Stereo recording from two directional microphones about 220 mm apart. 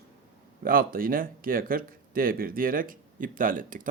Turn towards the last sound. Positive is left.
turn(degrees=-40)  # may be behind; listen again after turning